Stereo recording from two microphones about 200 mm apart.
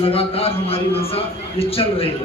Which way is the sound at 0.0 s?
30° left (ahead or behind).